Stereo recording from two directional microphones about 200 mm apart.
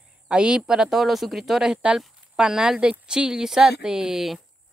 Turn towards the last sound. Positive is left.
turn(degrees=0)  # may be behind; listen again after turning